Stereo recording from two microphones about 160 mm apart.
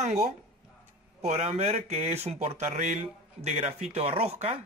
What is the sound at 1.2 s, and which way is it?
Speech, 45° right (ahead or behind).